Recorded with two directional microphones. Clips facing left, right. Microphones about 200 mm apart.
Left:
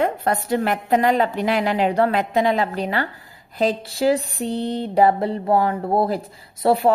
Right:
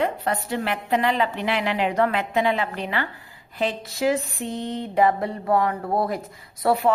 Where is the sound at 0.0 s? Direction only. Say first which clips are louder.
Left 3 dB; 45° left (ahead or behind).